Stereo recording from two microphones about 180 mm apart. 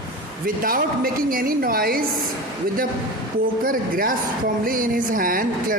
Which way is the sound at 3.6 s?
50° right (ahead or behind).